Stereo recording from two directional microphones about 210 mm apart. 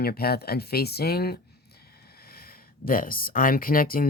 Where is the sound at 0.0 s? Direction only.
45° left (ahead or behind).